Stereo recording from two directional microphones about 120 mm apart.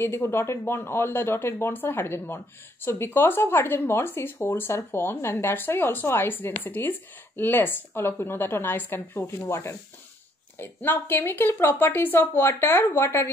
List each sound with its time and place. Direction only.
0.0 s speech: 20° left (ahead or behind)